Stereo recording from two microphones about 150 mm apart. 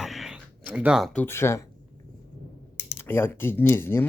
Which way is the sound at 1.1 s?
15° left (ahead or behind).